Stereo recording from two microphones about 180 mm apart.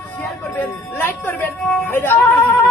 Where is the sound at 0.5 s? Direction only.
10° left (ahead or behind).